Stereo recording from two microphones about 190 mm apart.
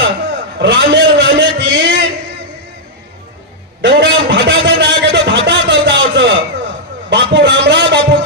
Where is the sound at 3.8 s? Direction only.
65° right (ahead or behind).